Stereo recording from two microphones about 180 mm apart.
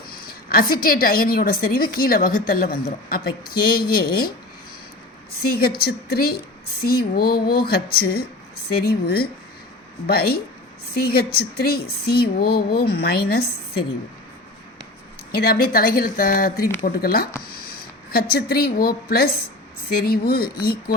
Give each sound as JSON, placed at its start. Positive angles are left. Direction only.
{"t": 0.1, "sound": "a woman's voice", "side_deg": 55}
{"t": 5.4, "sound": "a woman's voice", "side_deg": 60}
{"t": 15.3, "sound": "a woman's voice", "side_deg": 55}